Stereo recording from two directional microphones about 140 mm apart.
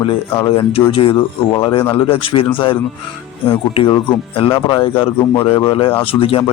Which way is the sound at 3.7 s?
45° left (ahead or behind).